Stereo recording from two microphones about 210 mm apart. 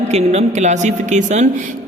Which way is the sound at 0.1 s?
30° right (ahead or behind).